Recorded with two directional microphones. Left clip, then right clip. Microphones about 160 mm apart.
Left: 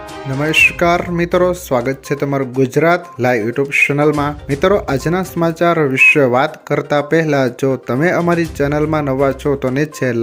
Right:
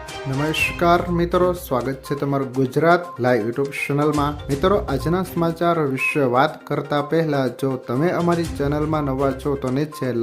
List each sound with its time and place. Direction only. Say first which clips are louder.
0.4 s speech: left 7 dB; 15° left (ahead or behind)